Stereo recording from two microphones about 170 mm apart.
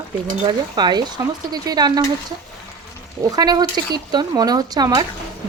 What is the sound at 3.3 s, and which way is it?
Frying, 25° right (ahead or behind).